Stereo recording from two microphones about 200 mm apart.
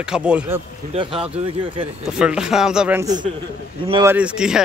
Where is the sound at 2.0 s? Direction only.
5° right (ahead or behind).